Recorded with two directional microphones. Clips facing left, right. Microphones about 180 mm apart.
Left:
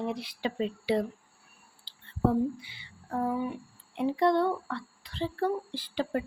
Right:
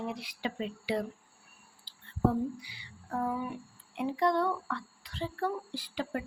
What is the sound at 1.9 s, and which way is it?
Whispering, 25° left (ahead or behind).